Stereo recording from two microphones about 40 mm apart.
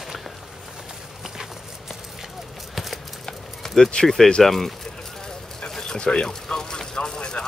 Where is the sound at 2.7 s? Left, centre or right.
Centre.